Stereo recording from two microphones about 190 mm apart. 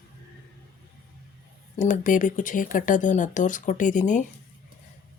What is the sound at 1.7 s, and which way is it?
Speech, 40° left (ahead or behind).